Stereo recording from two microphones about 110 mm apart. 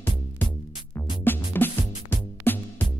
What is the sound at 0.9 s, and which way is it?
Music, 20° left (ahead or behind).